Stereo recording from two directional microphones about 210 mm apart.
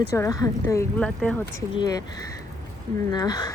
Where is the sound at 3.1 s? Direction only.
20° left (ahead or behind).